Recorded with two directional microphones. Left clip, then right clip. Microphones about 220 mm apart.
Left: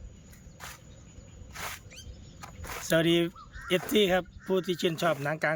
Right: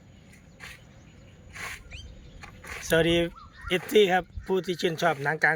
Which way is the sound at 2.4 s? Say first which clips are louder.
Right 1 dB; 10° left (ahead or behind).